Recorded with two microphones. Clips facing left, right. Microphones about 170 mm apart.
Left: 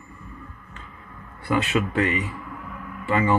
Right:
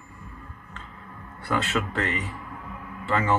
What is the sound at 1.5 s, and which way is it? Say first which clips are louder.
Speech: left 4 dB; 15° left (ahead or behind).